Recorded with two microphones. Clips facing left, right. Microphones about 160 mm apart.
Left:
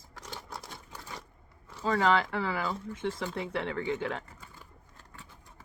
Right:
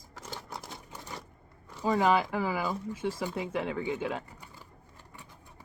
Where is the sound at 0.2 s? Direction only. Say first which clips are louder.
Right 1 dB; 20° right (ahead or behind).